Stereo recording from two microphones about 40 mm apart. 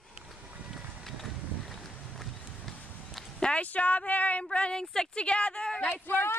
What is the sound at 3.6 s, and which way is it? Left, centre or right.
Speech, left.